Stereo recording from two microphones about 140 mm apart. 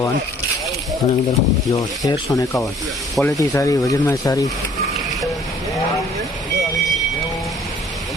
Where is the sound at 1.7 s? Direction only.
25° left (ahead or behind).